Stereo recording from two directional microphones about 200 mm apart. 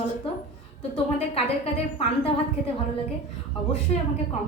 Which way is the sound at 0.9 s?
30° left (ahead or behind).